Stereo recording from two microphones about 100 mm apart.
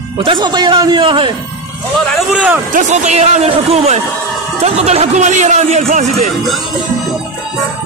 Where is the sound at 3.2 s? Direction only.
90° right.